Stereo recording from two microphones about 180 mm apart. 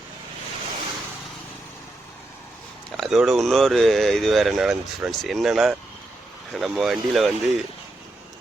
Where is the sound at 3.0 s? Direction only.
Centre (ahead or behind).